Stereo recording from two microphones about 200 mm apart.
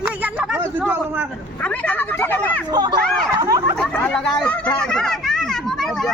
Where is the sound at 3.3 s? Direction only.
15° right (ahead or behind).